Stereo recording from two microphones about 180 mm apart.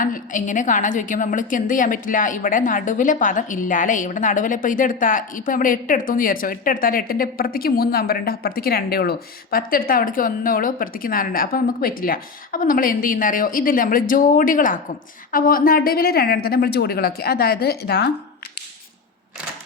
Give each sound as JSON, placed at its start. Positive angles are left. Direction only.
{"t": 0.0, "sound": "a woman's voice", "side_deg": 45}